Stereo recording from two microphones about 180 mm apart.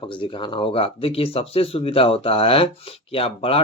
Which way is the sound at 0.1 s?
25° left (ahead or behind).